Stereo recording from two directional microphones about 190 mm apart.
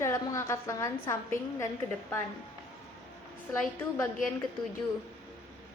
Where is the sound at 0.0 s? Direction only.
15° left (ahead or behind).